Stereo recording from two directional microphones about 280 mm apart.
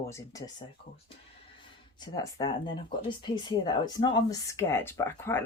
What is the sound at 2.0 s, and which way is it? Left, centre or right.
Speech, centre.